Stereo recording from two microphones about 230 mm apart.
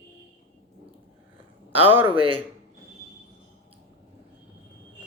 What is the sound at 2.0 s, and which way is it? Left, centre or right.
Speech, right.